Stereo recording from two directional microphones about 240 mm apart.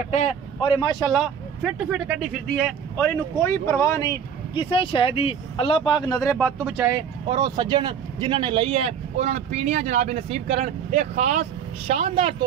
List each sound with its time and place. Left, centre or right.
0.1 s speech: left
1.1 s speech: centre
6.3 s speech: centre
7.2 s speech: centre